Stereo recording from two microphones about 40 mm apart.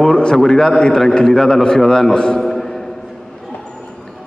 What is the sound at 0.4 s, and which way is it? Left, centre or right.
A man's voice, centre.